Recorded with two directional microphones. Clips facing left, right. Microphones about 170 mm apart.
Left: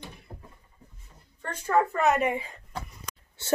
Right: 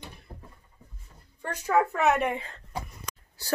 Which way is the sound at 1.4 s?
10° right (ahead or behind).